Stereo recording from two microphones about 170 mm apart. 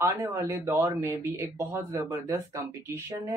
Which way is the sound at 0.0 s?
20° right (ahead or behind).